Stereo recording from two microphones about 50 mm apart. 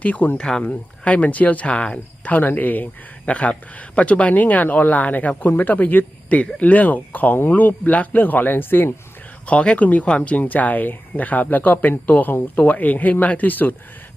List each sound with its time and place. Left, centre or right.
0.0 s speech: left
0.3 s speech: centre
2.3 s speech: left
5.7 s speech: left
9.5 s speech: left